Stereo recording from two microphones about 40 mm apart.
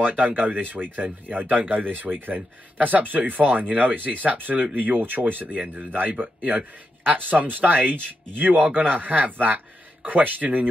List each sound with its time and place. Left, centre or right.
0.0 s speech: right